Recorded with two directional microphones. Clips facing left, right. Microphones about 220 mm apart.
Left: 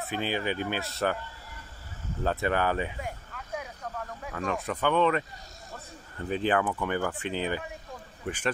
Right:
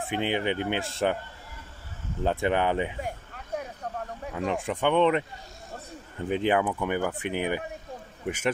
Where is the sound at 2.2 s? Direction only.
20° right (ahead or behind).